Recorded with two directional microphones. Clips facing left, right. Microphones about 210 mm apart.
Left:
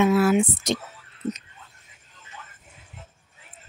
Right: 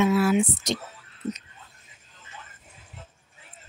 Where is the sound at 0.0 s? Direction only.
55° left (ahead or behind).